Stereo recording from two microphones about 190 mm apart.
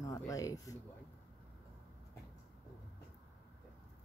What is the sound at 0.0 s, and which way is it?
Speech, 15° left (ahead or behind).